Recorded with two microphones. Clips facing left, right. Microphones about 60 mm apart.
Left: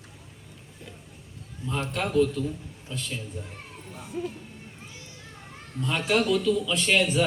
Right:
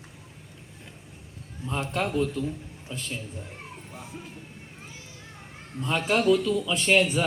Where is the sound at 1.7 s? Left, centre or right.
Centre.